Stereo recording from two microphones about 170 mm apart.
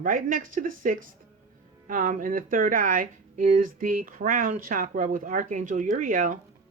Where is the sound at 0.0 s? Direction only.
55° right (ahead or behind).